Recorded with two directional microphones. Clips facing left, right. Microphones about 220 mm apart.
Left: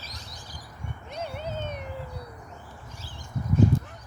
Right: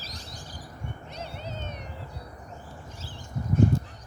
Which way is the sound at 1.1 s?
55° left (ahead or behind).